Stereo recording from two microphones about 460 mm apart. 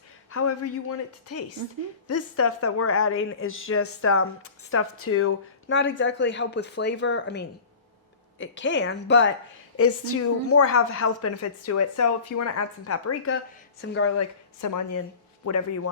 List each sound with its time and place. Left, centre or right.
0.3 s a woman's voice: left
14.6 s a woman's voice: left